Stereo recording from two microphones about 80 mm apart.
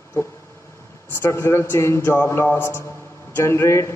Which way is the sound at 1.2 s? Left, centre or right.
Left.